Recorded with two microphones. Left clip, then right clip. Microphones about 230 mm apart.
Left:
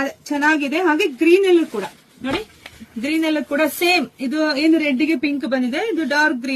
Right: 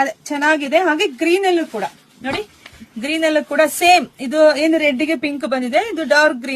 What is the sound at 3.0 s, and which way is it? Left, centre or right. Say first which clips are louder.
Speech: right 3 dB; right.